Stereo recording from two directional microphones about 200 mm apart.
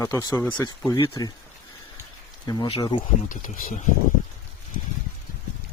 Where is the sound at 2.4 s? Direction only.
20° left (ahead or behind).